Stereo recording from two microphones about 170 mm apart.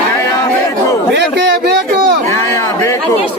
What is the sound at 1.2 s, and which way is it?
A man's voice, 90° right.